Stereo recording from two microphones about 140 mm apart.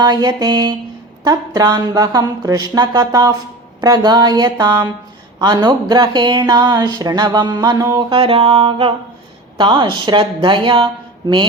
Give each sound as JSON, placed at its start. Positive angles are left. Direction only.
{"t": 0.0, "sound": "speech", "side_deg": -30}
{"t": 8.2, "sound": "speech", "side_deg": -40}